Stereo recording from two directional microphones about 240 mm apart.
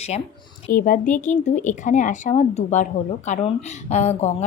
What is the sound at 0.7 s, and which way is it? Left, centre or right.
Speech, left.